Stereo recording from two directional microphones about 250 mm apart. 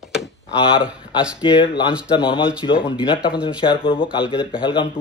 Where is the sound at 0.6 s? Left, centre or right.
Centre.